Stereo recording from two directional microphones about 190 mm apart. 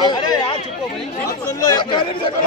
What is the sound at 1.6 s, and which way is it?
Speech, 20° left (ahead or behind).